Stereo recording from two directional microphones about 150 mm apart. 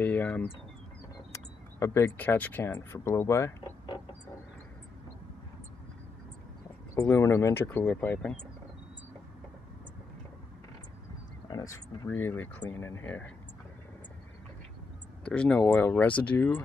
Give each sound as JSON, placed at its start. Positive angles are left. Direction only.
{"t": 0.0, "sound": "speech", "side_deg": 10}
{"t": 7.0, "sound": "speech", "side_deg": 20}
{"t": 11.4, "sound": "speech", "side_deg": 25}
{"t": 15.2, "sound": "speech", "side_deg": 5}